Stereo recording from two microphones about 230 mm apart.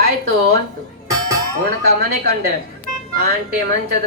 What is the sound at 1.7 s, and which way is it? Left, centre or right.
Speech, right.